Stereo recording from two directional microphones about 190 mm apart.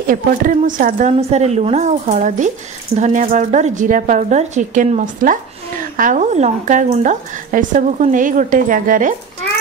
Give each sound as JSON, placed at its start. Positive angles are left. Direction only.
{"t": 0.0, "sound": "a woman's voice", "side_deg": -45}